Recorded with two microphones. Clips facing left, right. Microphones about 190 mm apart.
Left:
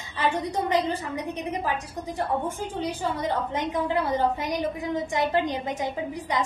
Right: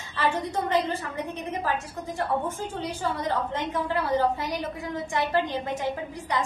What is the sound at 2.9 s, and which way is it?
A woman's voice, 15° left (ahead or behind).